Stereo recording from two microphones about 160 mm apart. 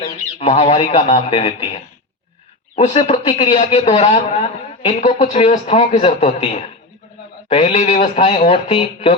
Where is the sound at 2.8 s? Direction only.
40° left (ahead or behind).